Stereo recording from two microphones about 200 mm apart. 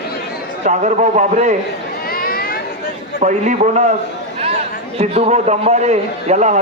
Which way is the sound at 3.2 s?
35° right (ahead or behind).